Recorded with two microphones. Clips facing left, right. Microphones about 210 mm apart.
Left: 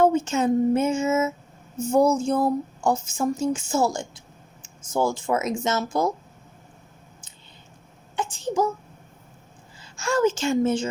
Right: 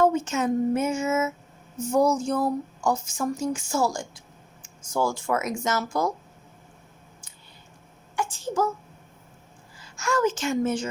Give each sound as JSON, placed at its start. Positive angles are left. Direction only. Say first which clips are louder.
{"t": 0.0, "sound": "speech", "louder": "left 2 dB", "side_deg": 30}
{"t": 8.1, "sound": "a child's voice", "louder": "left 2 dB", "side_deg": 20}
{"t": 9.8, "sound": "a woman's voice", "louder": "left 3 dB", "side_deg": 25}